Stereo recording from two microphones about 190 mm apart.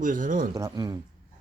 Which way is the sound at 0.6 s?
20° right (ahead or behind).